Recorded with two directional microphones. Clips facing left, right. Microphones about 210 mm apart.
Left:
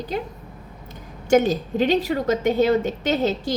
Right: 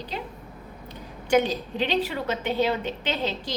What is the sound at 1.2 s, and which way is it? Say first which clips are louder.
A woman's voice: left 5 dB; 45° left (ahead or behind).